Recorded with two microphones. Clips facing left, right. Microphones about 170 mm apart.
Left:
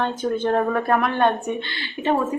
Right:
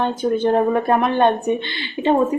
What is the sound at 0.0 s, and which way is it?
A woman's voice, 10° right (ahead or behind).